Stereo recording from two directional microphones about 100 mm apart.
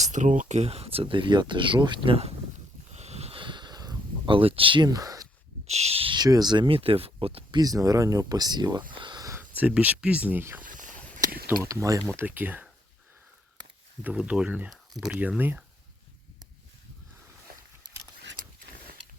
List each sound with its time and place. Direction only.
0.6 s speech: 90° right; by 2.1 s 50° right (ahead or behind)
2.9 s a sound: 90° right
3.4 s a sound: 50° right (ahead or behind)
4.3 s speech: 65° right (ahead or behind)
4.9 s speech: 40° right (ahead or behind)
5.6 s speech: 90° right; by 6.1 s 75° right (ahead or behind)
6.1 s speech: 40° right (ahead or behind)
6.7 s speech: 65° right (ahead or behind)
7.5 s speech: 35° right (ahead or behind)
8.9 s a sound: 50° right (ahead or behind)
9.4 s speech: 15° right (ahead or behind); by 12.0 s 35° right (ahead or behind)
12.1 s speech: 20° right (ahead or behind)
14.0 s speech: 10° right (ahead or behind)